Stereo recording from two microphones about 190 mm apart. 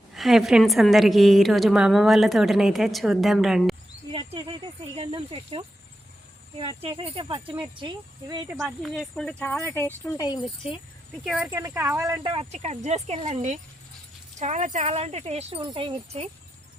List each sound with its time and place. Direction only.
0.1 s a woman's voice: centre (ahead or behind)
4.1 s speech: 25° right (ahead or behind)
8.4 s speech: 5° right (ahead or behind); by 10.5 s 20° left (ahead or behind)
11.2 s a woman's voice: 5° right (ahead or behind)
11.5 s speech: 15° right (ahead or behind); by 16.3 s 30° right (ahead or behind)